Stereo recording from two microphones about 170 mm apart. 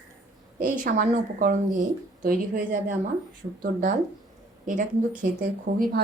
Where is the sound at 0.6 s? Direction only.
50° right (ahead or behind).